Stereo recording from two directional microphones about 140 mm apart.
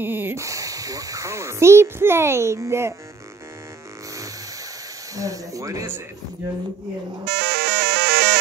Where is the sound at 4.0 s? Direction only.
25° right (ahead or behind).